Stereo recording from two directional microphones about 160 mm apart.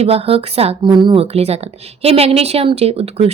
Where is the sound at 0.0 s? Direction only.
40° right (ahead or behind).